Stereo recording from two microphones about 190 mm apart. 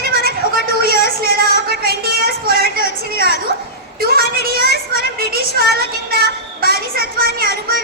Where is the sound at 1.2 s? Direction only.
60° left (ahead or behind).